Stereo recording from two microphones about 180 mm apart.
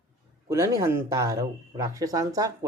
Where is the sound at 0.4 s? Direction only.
15° right (ahead or behind).